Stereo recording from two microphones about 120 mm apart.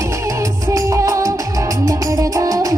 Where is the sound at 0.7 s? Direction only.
25° right (ahead or behind).